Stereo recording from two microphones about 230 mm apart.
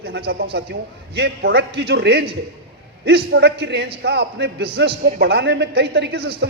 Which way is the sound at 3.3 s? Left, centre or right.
Right.